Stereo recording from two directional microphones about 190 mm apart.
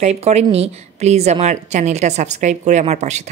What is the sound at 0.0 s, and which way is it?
A woman's voice, 35° right (ahead or behind).